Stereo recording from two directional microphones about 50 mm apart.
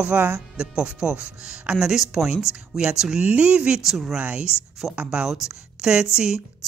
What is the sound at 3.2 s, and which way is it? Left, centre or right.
Speech, right.